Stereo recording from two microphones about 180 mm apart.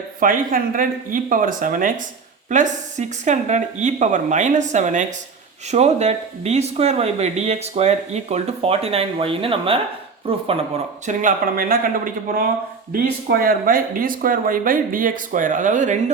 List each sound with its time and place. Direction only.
0.2 s speech: 50° right (ahead or behind); by 10.6 s 30° right (ahead or behind)
11.0 s speech: 45° right (ahead or behind)